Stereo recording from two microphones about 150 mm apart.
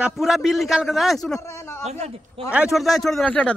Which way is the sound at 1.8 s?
45° right (ahead or behind).